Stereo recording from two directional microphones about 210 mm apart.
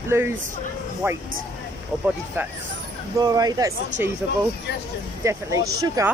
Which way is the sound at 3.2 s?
20° right (ahead or behind).